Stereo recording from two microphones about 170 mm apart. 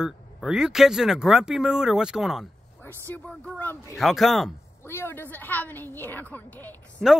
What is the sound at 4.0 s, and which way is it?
Speech, centre (ahead or behind).